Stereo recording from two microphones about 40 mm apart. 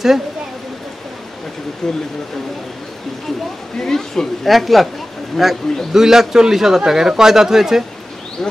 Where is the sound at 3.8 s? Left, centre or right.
Centre.